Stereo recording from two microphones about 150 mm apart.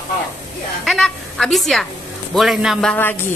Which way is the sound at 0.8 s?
5° left (ahead or behind).